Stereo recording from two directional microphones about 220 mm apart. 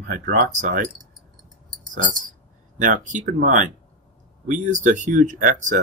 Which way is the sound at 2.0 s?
35° right (ahead or behind).